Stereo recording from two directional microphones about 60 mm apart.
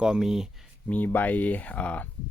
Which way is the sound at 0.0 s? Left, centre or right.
Centre.